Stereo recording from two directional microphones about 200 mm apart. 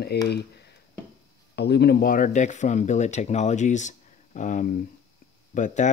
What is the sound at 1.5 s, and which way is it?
Speech, 55° left (ahead or behind).